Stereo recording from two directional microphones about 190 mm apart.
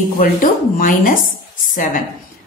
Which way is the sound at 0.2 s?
45° left (ahead or behind).